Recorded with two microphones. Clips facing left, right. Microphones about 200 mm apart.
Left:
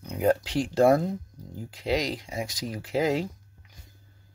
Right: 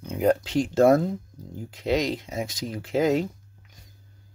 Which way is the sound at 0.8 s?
45° right (ahead or behind).